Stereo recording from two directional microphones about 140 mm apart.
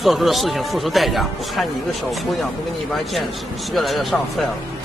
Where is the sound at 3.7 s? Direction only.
Centre (ahead or behind).